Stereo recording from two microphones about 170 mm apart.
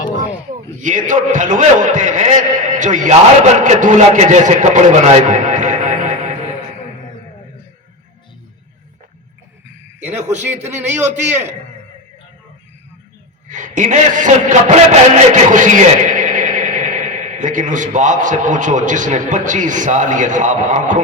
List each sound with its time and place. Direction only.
0.8 s a man's voice: 50° right (ahead or behind)
10.2 s a man's voice: 10° right (ahead or behind)
13.5 s a man's voice: 45° right (ahead or behind)